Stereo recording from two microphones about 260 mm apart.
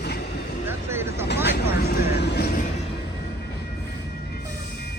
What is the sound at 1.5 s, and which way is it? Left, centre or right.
Vehicle, left.